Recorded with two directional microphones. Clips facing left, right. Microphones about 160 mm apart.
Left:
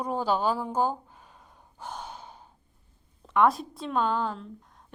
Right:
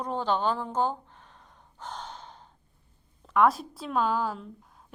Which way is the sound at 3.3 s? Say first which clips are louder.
Even; centre (ahead or behind).